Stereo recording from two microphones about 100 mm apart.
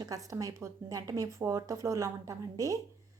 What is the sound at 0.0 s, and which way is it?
A woman's voice, 35° right (ahead or behind).